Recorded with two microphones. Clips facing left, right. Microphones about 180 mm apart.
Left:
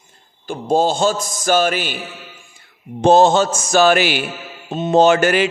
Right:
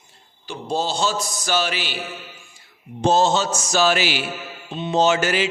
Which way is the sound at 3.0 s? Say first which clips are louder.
Left 6 dB; 60° left (ahead or behind).